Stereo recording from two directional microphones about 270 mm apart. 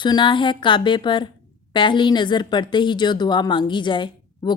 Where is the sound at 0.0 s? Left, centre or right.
Centre.